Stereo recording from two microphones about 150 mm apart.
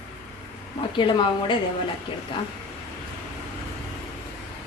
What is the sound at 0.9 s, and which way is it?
Speech, 35° left (ahead or behind).